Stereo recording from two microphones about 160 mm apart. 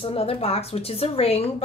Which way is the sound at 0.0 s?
35° left (ahead or behind).